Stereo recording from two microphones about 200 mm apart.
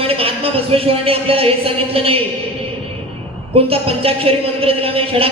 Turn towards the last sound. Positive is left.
turn(degrees=-30)  # may be behind; listen again after turning